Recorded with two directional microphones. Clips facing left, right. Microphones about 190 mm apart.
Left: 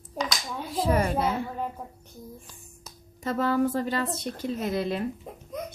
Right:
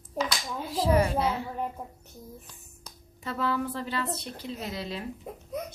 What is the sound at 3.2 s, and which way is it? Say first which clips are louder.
Speech: left 5 dB; 45° left (ahead or behind).